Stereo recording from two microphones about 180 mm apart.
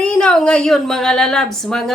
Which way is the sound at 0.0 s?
5° left (ahead or behind).